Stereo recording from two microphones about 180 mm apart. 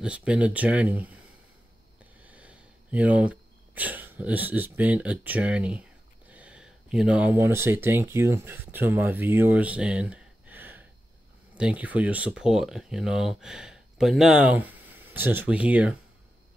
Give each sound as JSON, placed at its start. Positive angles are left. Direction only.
{"t": 0.0, "sound": "speech", "side_deg": -5}
{"t": 2.2, "sound": "speech", "side_deg": -5}